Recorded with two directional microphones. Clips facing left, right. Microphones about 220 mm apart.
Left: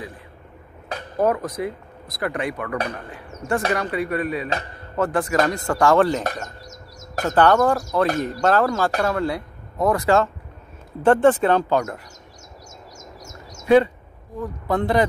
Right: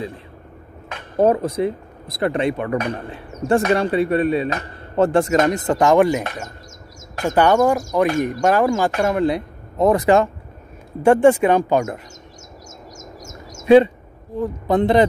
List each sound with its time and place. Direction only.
1.1 s speech: 25° right (ahead or behind)
7.2 s a man's voice: 15° right (ahead or behind)
12.9 s bird: 45° right (ahead or behind)
13.6 s a sound: 20° right (ahead or behind)
14.3 s speech: 25° right (ahead or behind)